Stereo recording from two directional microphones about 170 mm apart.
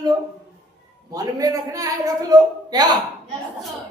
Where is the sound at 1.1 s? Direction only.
20° right (ahead or behind).